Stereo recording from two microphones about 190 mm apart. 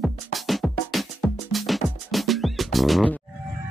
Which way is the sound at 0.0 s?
Centre (ahead or behind).